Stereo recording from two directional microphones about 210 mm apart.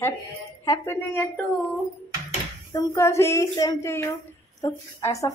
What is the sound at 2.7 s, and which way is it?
A woman's voice, 15° left (ahead or behind).